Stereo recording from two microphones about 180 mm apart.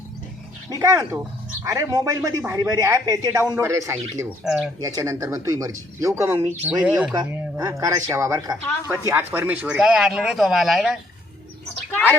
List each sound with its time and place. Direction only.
0.7 s speech: 20° right (ahead or behind)
4.4 s speech: 5° right (ahead or behind)
4.8 s speech: 20° right (ahead or behind)
7.1 s speech: 15° right (ahead or behind); by 11.0 s centre (ahead or behind)